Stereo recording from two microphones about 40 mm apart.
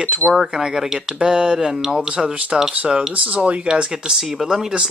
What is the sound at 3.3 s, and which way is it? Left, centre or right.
Speech, right.